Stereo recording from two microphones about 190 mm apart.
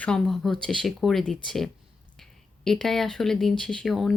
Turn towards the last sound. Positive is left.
turn(degrees=0)  # may be behind; listen again after turning